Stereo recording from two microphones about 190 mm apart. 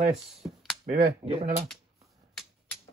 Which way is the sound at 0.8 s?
40° right (ahead or behind).